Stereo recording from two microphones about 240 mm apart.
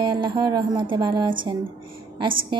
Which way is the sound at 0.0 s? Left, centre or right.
Centre.